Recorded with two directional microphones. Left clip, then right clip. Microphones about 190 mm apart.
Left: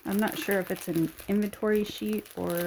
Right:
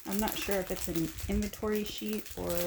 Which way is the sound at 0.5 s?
45° left (ahead or behind).